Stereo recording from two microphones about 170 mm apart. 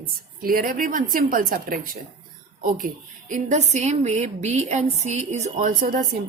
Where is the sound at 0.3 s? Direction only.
60° right (ahead or behind).